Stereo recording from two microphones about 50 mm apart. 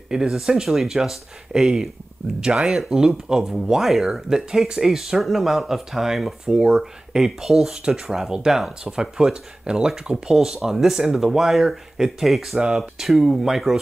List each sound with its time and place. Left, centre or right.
0.1 s speech: centre